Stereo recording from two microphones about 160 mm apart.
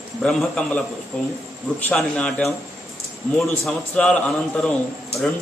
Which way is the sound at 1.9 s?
5° left (ahead or behind).